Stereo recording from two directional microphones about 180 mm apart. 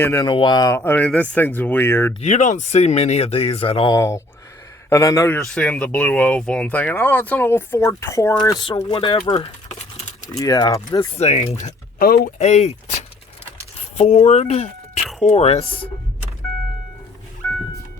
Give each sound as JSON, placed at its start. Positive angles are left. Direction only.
{"t": 0.0, "sound": "speech", "side_deg": 15}
{"t": 0.3, "sound": "speech", "side_deg": 25}
{"t": 2.2, "sound": "speech", "side_deg": 40}
{"t": 3.9, "sound": "speech", "side_deg": 15}
{"t": 5.4, "sound": "speech", "side_deg": 5}
{"t": 11.1, "sound": "speech", "side_deg": 35}
{"t": 11.9, "sound": "speech", "side_deg": 55}
{"t": 12.4, "sound": "speech", "side_deg": 35}
{"t": 13.7, "sound": "speech", "side_deg": 40}
{"t": 17.4, "sound": "vehicle", "side_deg": 10}